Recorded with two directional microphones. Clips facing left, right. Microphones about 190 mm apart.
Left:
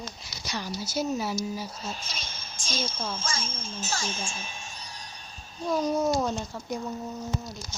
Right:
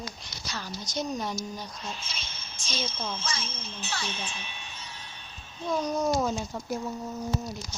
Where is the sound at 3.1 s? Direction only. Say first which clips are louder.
Left 1 dB; 45° left (ahead or behind).